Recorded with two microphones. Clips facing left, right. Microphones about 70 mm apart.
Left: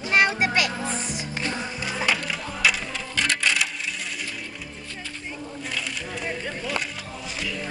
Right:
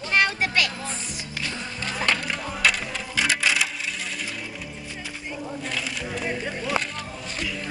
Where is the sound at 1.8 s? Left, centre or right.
Centre.